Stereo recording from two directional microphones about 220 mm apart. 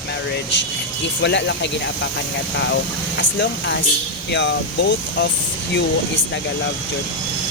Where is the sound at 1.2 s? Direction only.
55° left (ahead or behind).